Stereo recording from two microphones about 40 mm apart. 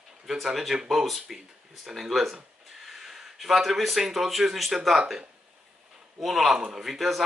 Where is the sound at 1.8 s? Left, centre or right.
Centre.